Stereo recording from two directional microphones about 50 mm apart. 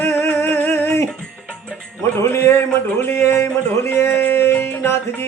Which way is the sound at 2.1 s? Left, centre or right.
Left.